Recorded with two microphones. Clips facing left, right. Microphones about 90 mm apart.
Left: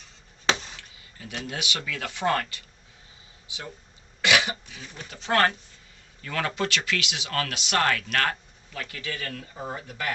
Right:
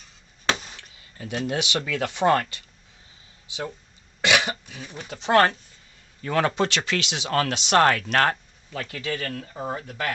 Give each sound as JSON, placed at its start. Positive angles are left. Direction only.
{"t": 0.5, "sound": "chop", "side_deg": -5}
{"t": 1.2, "sound": "speech", "side_deg": -30}
{"t": 2.0, "sound": "speech", "side_deg": -20}
{"t": 4.2, "sound": "speech", "side_deg": -20}
{"t": 6.2, "sound": "speech", "side_deg": -30}
{"t": 9.7, "sound": "speech", "side_deg": 10}